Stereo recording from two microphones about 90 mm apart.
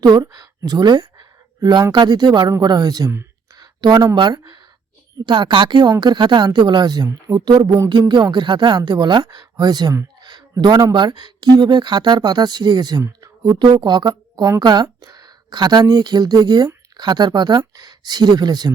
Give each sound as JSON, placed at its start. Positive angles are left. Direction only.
{"t": 0.0, "sound": "a woman's voice", "side_deg": -45}
{"t": 10.2, "sound": "a sound", "side_deg": -55}
{"t": 10.9, "sound": "a woman's voice", "side_deg": -60}
{"t": 13.0, "sound": "a woman's voice", "side_deg": -40}